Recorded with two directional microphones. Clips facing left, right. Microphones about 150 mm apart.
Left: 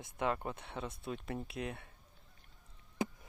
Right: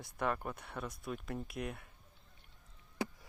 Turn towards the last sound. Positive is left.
turn(degrees=20)  # may be behind; listen again after turning